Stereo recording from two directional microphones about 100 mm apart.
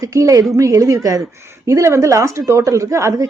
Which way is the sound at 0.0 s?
35° right (ahead or behind).